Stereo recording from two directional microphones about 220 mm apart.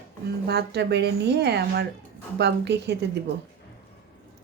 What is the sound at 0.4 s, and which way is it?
Speech, 50° right (ahead or behind).